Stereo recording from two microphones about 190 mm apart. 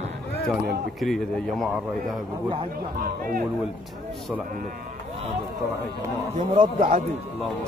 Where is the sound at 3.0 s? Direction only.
50° right (ahead or behind).